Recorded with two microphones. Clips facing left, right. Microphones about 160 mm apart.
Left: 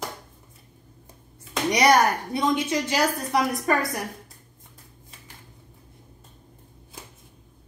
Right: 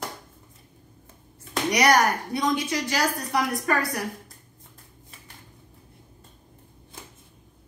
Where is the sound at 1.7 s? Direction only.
25° left (ahead or behind).